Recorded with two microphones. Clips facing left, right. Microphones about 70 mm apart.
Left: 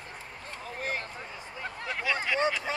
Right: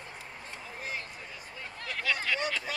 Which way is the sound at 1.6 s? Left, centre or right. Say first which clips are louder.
Left 4 dB; left.